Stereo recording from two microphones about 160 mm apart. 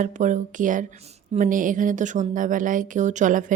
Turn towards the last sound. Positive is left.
turn(degrees=-55)  # may be behind; listen again after turning